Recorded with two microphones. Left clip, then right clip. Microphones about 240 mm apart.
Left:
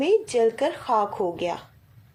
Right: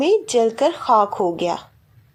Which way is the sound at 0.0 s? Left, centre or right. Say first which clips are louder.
Right 4 dB; right.